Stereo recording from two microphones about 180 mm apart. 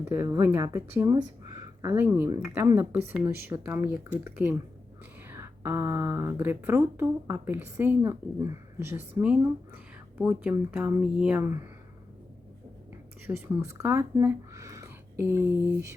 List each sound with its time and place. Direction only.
0.0 s a woman's voice: 20° right (ahead or behind)
5.3 s a sound: 15° right (ahead or behind)
6.4 s a woman's voice: 10° right (ahead or behind)
13.2 s speech: 15° right (ahead or behind)